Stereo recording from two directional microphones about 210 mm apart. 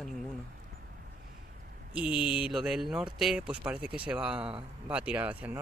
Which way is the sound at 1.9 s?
5° right (ahead or behind).